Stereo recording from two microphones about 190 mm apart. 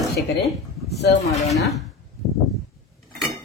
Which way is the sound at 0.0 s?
Centre (ahead or behind).